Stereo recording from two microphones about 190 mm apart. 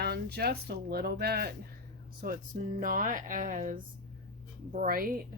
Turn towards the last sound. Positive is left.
turn(degrees=-50)  # may be behind; listen again after turning